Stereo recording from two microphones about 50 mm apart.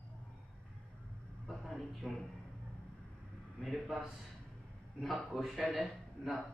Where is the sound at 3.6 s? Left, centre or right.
Centre.